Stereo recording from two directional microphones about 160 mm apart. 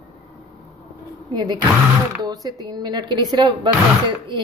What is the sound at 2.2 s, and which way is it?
Speech, 25° right (ahead or behind).